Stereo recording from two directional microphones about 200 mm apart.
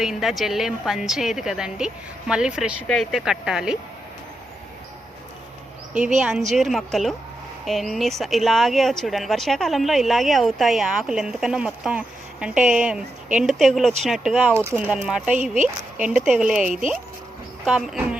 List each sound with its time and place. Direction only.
0.0 s speech: centre (ahead or behind)
6.1 s speech: 5° right (ahead or behind)
14.5 s speech: 15° right (ahead or behind)
15.4 s speech: 40° right (ahead or behind)
16.0 s speech: 5° right (ahead or behind)
17.7 s speech: 5° right (ahead or behind)